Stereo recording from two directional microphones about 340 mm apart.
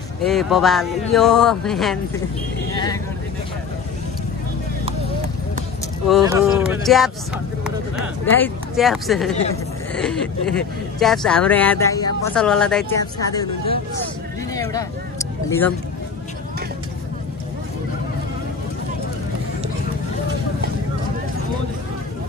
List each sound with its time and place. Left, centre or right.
0.2 s speech: centre
2.7 s speech: centre
6.0 s speech: centre
14.5 s a sound: centre